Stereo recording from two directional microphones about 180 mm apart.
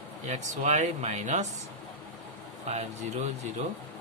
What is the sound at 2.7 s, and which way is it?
Speech, 40° right (ahead or behind).